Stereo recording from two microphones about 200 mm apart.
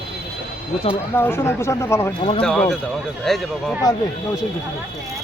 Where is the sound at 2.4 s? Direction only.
5° left (ahead or behind).